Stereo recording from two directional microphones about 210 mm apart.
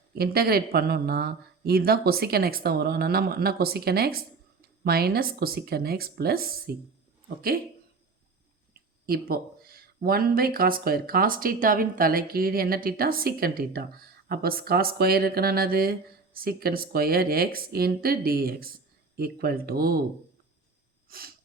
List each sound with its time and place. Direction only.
0.1 s speech: 45° right (ahead or behind)
9.0 s speech: 45° right (ahead or behind)
21.1 s sneeze: 45° right (ahead or behind)